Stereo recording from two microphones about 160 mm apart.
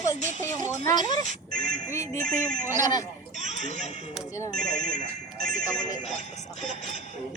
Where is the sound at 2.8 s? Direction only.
25° left (ahead or behind).